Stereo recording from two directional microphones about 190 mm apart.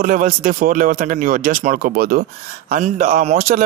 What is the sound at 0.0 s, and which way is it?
Speech, 45° right (ahead or behind).